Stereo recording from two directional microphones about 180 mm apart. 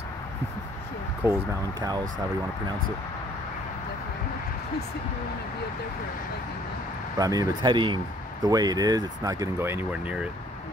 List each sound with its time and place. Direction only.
1.2 s speech: 10° right (ahead or behind)
7.2 s speech: 20° right (ahead or behind)